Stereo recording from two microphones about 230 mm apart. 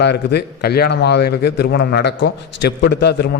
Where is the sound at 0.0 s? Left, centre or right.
Left.